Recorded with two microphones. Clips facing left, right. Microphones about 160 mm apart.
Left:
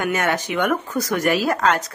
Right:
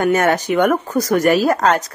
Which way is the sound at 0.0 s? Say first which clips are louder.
Right 6 dB; 40° right (ahead or behind).